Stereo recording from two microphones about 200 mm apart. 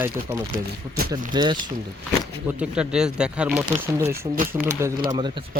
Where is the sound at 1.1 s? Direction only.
20° right (ahead or behind).